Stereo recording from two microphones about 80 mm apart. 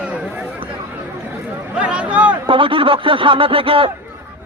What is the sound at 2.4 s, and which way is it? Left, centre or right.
Speech, right.